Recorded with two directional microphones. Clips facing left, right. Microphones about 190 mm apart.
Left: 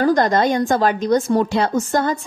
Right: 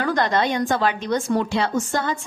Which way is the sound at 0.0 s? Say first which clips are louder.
Left 5 dB; 40° left (ahead or behind).